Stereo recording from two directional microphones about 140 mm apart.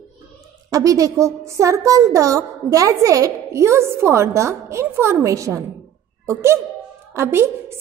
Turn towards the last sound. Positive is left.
turn(degrees=-20)  # may be behind; listen again after turning